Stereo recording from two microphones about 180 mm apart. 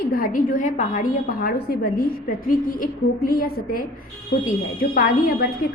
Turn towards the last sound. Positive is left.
turn(degrees=50)  # may be behind; listen again after turning